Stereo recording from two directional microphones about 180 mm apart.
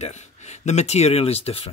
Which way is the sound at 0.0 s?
40° left (ahead or behind).